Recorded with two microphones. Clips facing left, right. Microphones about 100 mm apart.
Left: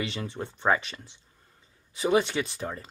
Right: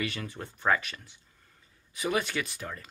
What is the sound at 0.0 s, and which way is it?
Speech, 25° left (ahead or behind).